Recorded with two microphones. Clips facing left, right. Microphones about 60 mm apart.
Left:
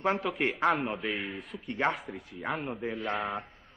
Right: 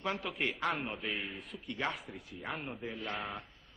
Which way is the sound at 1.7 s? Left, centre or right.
Left.